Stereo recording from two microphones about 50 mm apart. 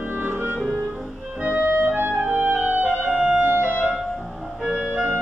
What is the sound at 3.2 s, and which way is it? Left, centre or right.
Music, right.